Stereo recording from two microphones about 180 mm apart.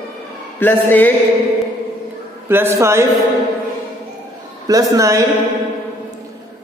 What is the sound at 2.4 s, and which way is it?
Speech, 10° right (ahead or behind).